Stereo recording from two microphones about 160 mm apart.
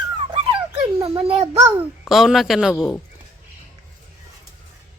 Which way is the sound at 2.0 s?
Centre (ahead or behind).